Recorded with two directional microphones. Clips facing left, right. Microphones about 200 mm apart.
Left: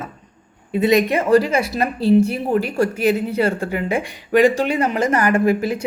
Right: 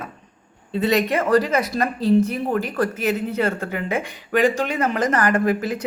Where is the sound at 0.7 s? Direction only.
15° left (ahead or behind).